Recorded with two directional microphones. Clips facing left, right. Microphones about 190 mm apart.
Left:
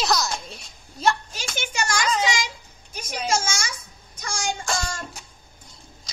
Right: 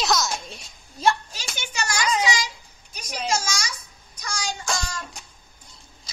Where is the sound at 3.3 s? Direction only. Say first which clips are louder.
Left 2 dB; 50° left (ahead or behind).